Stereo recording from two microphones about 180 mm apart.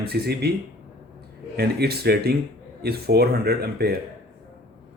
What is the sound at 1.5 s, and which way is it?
Speech, 60° right (ahead or behind).